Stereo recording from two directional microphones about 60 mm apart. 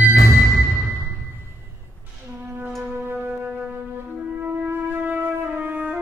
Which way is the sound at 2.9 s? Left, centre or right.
Right.